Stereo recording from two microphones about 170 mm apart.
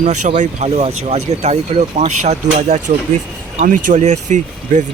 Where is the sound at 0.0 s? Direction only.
45° right (ahead or behind).